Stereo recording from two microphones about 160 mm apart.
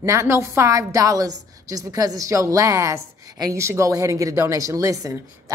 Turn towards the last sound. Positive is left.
turn(degrees=-20)  # may be behind; listen again after turning